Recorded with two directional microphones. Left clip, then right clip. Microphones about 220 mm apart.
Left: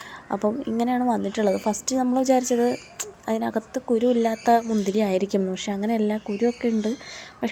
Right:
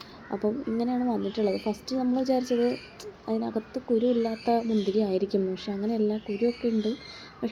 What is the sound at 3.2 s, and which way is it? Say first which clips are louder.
A woman's voice: left 5 dB; 10° left (ahead or behind).